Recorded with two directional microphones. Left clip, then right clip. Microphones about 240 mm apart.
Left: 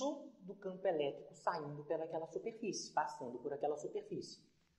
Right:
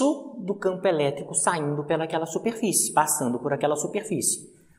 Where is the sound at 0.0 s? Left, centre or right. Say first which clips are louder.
Right 17 dB; right.